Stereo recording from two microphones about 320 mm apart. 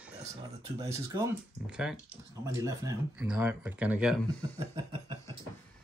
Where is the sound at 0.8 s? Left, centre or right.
Centre.